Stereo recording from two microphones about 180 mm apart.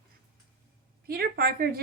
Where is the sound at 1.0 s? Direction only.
55° right (ahead or behind).